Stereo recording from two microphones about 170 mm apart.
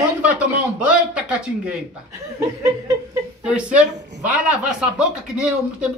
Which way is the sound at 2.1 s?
20° right (ahead or behind).